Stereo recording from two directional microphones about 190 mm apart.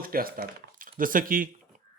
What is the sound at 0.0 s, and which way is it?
Speech, 50° right (ahead or behind).